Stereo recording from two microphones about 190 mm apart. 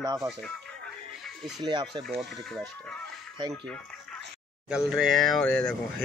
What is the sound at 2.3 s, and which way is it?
Speech, centre (ahead or behind).